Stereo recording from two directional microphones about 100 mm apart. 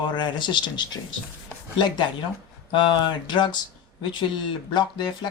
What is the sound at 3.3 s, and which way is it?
Speech, 50° left (ahead or behind).